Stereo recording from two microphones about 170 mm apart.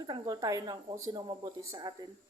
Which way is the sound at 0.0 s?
25° right (ahead or behind).